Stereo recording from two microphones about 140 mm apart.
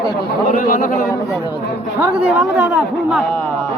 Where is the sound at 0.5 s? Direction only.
75° left (ahead or behind).